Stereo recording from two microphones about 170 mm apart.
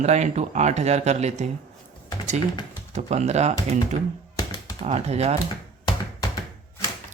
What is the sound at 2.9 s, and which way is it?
Speech, 40° right (ahead or behind).